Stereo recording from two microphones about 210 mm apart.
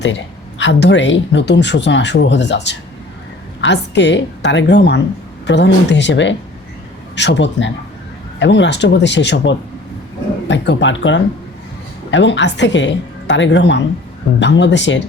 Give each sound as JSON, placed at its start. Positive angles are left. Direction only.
{"t": 0.6, "sound": "speech", "side_deg": 60}